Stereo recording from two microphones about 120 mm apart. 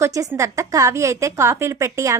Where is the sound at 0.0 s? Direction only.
25° right (ahead or behind).